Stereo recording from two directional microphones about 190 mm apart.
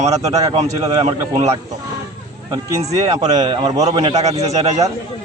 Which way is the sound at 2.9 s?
35° right (ahead or behind).